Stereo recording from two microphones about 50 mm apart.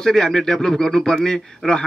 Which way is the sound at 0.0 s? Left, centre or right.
Centre.